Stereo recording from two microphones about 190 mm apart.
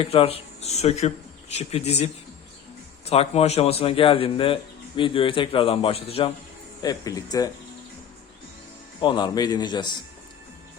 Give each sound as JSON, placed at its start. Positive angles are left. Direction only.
{"t": 0.0, "sound": "a man's voice", "side_deg": 30}
{"t": 6.8, "sound": "a man's voice", "side_deg": 20}
{"t": 9.0, "sound": "a man's voice", "side_deg": 25}